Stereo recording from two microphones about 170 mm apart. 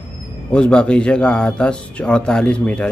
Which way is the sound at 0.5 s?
5° left (ahead or behind).